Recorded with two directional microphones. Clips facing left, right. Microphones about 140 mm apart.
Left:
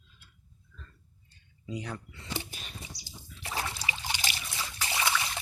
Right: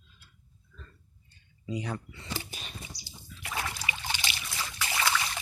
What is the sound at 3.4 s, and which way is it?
Trickle, 30° left (ahead or behind).